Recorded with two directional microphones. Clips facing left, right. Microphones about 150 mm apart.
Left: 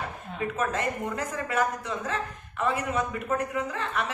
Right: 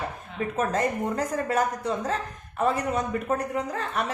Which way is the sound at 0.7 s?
40° right (ahead or behind).